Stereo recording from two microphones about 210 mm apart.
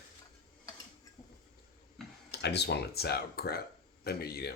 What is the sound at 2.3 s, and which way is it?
Speech, 50° left (ahead or behind).